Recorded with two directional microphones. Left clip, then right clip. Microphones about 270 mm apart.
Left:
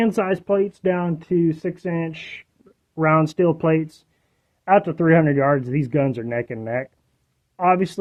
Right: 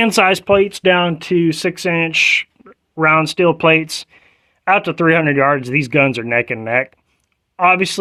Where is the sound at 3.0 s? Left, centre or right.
Centre.